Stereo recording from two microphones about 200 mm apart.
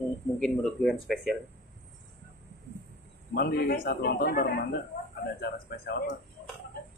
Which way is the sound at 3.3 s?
50° left (ahead or behind).